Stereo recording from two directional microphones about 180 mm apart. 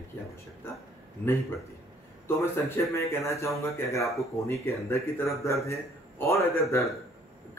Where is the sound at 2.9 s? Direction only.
15° left (ahead or behind).